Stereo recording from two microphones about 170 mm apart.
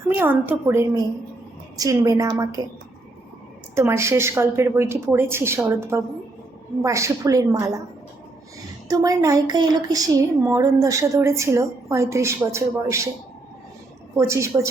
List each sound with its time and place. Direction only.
0.1 s a woman's voice: 10° right (ahead or behind)
3.8 s a woman's voice: 15° right (ahead or behind)
8.9 s a woman's voice: 20° right (ahead or behind)
14.2 s a woman's voice: 15° right (ahead or behind)